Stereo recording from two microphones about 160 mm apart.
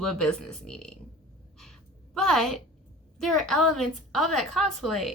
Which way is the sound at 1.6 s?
5° left (ahead or behind).